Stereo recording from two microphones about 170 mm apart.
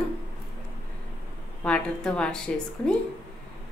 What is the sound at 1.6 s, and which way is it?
A woman's voice, 5° left (ahead or behind).